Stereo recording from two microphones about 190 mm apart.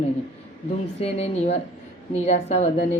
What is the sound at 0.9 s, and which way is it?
Speech, 35° left (ahead or behind).